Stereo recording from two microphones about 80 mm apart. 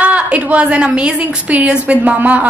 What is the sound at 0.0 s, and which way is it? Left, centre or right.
A woman's voice, centre.